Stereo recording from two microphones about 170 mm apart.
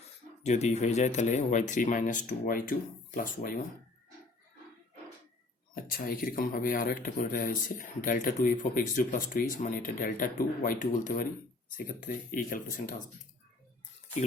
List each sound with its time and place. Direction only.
0.4 s speech: 40° left (ahead or behind)
5.7 s speech: 60° left (ahead or behind)